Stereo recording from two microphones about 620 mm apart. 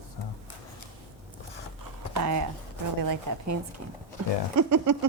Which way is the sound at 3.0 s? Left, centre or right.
Right.